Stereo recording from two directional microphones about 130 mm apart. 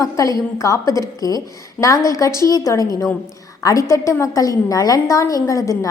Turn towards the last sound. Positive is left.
turn(degrees=25)  # may be behind; listen again after turning